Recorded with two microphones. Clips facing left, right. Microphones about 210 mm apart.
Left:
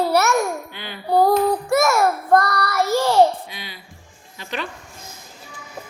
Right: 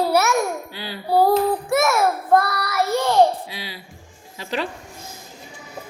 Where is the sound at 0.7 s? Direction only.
35° right (ahead or behind).